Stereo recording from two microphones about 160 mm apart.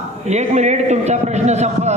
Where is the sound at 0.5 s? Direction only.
45° right (ahead or behind).